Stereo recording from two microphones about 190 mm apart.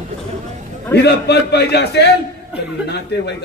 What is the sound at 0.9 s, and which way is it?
A man's voice, 60° left (ahead or behind).